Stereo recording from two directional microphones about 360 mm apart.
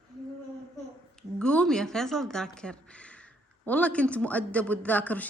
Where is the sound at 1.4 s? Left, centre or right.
Centre.